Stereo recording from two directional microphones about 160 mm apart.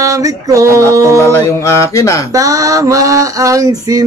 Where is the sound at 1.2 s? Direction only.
15° left (ahead or behind).